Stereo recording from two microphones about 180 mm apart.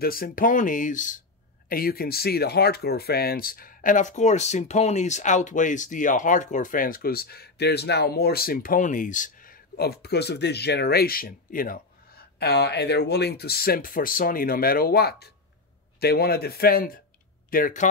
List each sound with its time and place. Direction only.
0.0 s speech: 55° left (ahead or behind)